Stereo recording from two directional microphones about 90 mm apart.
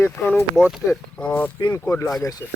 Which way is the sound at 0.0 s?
15° left (ahead or behind).